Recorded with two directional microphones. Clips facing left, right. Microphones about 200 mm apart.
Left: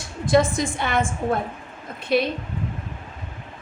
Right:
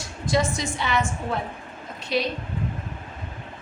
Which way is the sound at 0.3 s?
55° left (ahead or behind).